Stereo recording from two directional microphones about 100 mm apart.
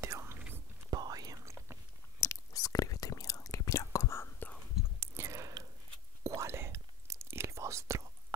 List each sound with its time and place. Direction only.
0.0 s whispering: 25° right (ahead or behind)
0.8 s whispering: 40° right (ahead or behind)
2.1 s whispering: 35° left (ahead or behind)
5.0 s whispering: 25° right (ahead or behind)